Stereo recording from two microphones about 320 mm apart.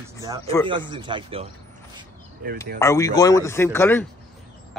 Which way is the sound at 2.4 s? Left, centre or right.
Right.